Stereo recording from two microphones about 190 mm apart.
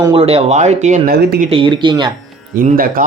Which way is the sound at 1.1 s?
55° right (ahead or behind).